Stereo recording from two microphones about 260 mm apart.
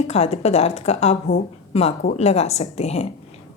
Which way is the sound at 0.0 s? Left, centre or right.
Left.